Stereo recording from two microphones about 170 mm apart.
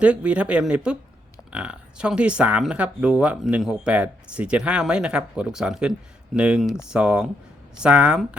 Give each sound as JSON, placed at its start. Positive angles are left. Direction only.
{"t": 0.0, "sound": "speech", "side_deg": -5}